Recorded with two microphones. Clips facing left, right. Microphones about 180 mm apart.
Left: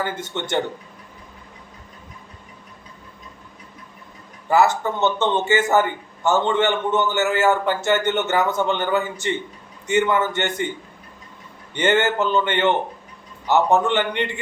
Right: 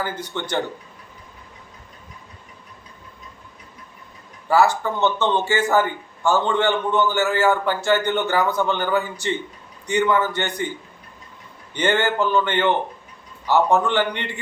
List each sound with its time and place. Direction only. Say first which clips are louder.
0.0 s a man's voice: left 1 dB; 25° left (ahead or behind)
4.4 s a man's voice: even; 20° left (ahead or behind)
11.7 s a man's voice: left 2 dB; 20° left (ahead or behind)